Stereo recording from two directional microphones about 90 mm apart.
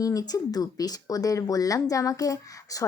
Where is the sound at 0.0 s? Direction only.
40° left (ahead or behind).